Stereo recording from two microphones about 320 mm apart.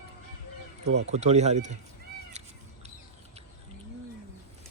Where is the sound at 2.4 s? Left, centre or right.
Right.